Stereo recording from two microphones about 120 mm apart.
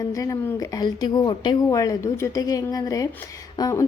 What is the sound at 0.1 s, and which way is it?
A woman's voice, 30° left (ahead or behind).